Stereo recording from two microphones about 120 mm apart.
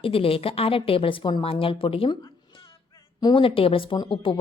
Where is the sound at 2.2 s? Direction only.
45° left (ahead or behind).